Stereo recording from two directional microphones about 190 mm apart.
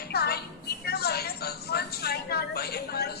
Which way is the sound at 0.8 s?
55° left (ahead or behind).